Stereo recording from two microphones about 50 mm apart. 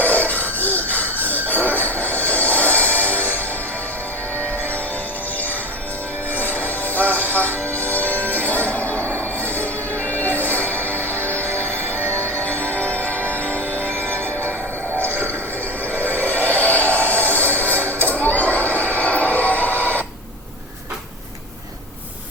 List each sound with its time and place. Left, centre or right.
0.0 s music: left
6.3 s music: left
18.9 s a sound: left